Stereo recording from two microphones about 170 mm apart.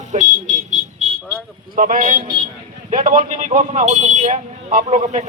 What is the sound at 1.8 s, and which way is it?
Speech, 50° right (ahead or behind).